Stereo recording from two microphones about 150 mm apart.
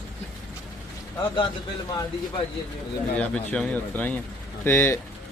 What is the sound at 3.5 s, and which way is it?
Speech, 5° left (ahead or behind).